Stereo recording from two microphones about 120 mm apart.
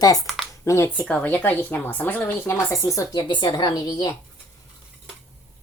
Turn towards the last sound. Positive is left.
turn(degrees=30)  # may be behind; listen again after turning